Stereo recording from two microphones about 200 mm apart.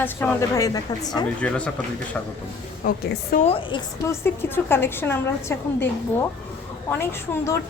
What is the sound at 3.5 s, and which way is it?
Speech, 25° left (ahead or behind).